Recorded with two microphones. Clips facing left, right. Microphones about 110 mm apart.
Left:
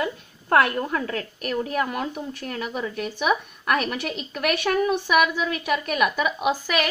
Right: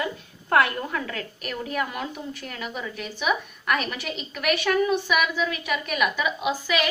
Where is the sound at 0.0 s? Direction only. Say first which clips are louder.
Left 2 dB; 35° left (ahead or behind); by 6.9 s 55° left (ahead or behind).